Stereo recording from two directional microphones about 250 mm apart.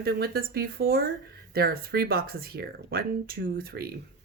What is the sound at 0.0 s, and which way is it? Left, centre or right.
Speech, right.